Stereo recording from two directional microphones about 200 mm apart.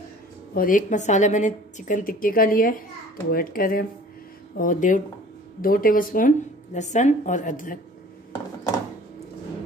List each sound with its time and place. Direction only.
0.6 s a woman's voice: 40° left (ahead or behind)